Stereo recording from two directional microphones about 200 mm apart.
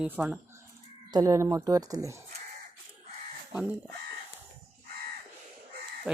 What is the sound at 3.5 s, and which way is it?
Speech, 5° right (ahead or behind).